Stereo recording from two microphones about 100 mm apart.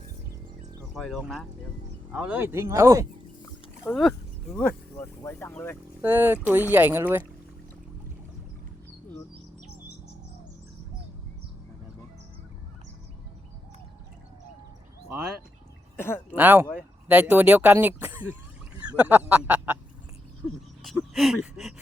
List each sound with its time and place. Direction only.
0.9 s speech: centre (ahead or behind)
2.1 s speech: 15° right (ahead or behind)
2.5 s speech: 25° right (ahead or behind)
3.9 s speech: 20° left (ahead or behind)
6.0 s speech: 20° right (ahead or behind)
16.0 s speech: 20° left (ahead or behind)
16.3 s speech: 20° right (ahead or behind)
20.8 s speech: centre (ahead or behind)